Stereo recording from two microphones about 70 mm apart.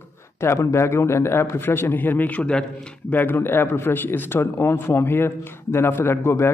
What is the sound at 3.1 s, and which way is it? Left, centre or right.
A man's voice, left.